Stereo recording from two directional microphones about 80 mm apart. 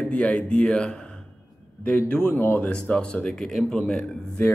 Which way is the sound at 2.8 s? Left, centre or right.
Centre.